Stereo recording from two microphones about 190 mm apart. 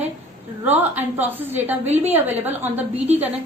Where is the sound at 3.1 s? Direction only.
35° right (ahead or behind).